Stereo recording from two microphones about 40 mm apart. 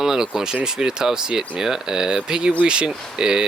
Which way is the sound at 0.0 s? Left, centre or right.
Centre.